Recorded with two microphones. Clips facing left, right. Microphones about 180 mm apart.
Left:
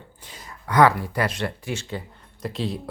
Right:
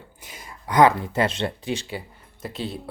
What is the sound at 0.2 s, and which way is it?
Speech, 10° right (ahead or behind).